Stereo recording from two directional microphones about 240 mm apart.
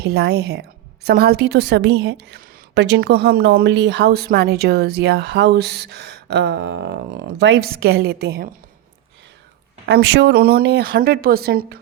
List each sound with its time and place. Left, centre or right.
0.0 s a woman's voice: right
9.8 s speech: right